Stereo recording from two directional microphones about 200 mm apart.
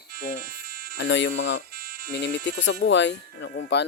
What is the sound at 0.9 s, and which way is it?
Speech, 65° left (ahead or behind).